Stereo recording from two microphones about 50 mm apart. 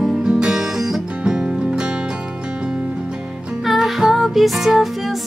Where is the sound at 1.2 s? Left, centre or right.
Centre.